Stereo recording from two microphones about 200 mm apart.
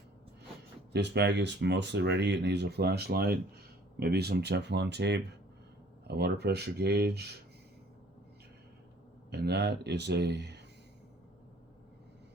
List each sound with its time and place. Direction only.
0.9 s speech: 60° right (ahead or behind)
9.3 s speech: 55° right (ahead or behind)